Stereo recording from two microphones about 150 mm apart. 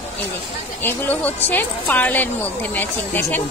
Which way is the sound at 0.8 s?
10° left (ahead or behind).